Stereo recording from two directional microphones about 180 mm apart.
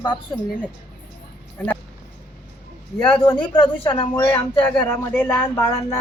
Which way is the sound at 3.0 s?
5° left (ahead or behind).